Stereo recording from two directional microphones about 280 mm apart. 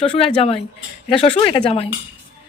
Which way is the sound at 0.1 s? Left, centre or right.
Left.